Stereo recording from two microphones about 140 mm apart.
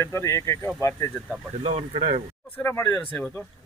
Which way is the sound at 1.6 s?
45° right (ahead or behind).